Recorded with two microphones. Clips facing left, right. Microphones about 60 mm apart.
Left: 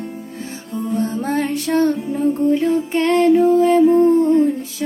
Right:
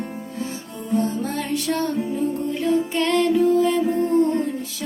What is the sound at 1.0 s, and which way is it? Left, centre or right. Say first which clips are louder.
Music: left 3 dB; left.